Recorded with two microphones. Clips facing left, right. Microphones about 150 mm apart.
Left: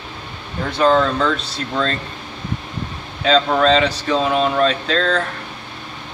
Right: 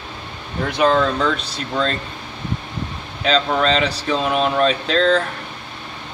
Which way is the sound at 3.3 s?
Centre (ahead or behind).